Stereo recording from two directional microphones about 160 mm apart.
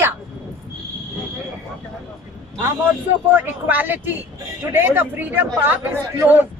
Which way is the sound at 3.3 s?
10° right (ahead or behind).